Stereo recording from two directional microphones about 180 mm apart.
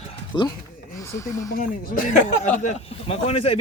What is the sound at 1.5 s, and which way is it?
Speech, 50° left (ahead or behind).